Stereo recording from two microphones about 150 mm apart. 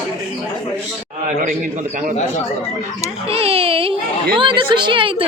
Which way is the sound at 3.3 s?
40° right (ahead or behind).